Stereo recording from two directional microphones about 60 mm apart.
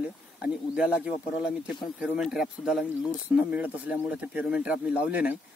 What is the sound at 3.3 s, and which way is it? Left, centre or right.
Speech, right.